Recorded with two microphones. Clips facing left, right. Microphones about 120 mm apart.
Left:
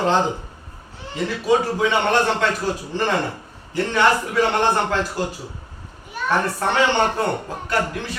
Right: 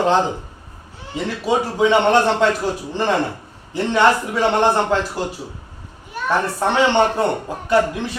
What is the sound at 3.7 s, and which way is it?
A man's voice, 20° right (ahead or behind).